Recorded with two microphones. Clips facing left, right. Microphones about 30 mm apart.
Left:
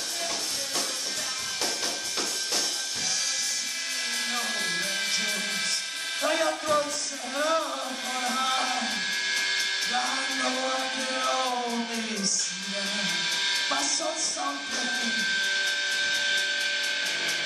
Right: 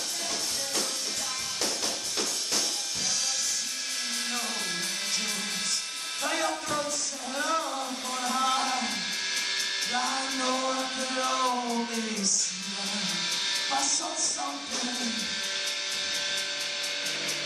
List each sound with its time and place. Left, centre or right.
4.3 s music: left
7.3 s a sound: centre
8.3 s music: centre